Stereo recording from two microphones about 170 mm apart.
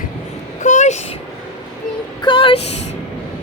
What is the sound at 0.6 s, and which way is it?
Vehicle, 45° left (ahead or behind).